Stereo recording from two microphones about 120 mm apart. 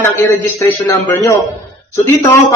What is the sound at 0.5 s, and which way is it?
Speech, 20° left (ahead or behind).